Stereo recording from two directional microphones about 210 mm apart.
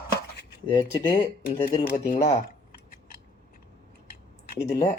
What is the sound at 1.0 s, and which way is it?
Speech, 20° left (ahead or behind).